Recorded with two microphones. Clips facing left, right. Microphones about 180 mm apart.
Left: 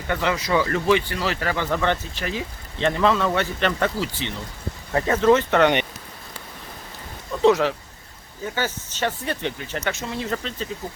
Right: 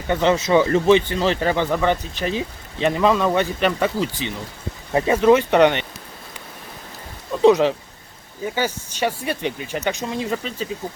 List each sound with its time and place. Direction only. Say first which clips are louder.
0.1 s speech: right 6 dB; 20° right (ahead or behind)
1.7 s speech: right 3 dB; 10° right (ahead or behind)
7.4 s speech: right 3 dB; 20° right (ahead or behind)